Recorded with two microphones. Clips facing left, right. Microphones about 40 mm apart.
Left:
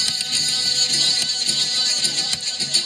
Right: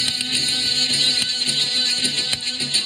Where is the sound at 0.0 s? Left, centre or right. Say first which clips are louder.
Right 1 dB; right.